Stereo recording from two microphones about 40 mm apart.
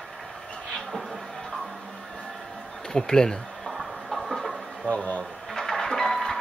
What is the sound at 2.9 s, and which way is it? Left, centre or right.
Speech, centre.